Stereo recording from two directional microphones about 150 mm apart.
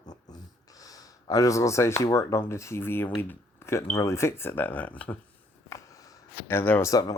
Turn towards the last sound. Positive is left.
turn(degrees=25)  # may be behind; listen again after turning